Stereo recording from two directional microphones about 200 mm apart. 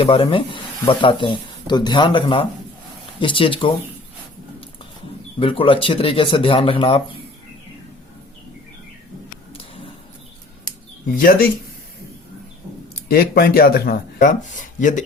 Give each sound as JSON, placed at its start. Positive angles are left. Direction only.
{"t": 0.0, "sound": "speech", "side_deg": 25}
{"t": 5.4, "sound": "speech", "side_deg": 25}
{"t": 9.5, "sound": "a sound", "side_deg": 25}
{"t": 11.2, "sound": "speech", "side_deg": 45}
{"t": 13.1, "sound": "speech", "side_deg": 50}